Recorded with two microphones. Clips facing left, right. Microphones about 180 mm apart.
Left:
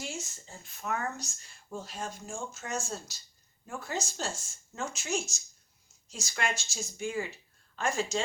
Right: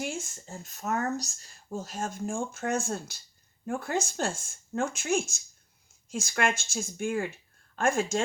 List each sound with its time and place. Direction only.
0.0 s speech: 55° right (ahead or behind)